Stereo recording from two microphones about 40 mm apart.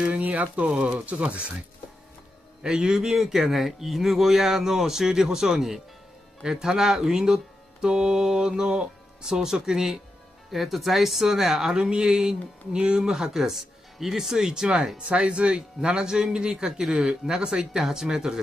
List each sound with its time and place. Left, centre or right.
0.0 s speech: right
2.6 s speech: centre
11.7 s speech: right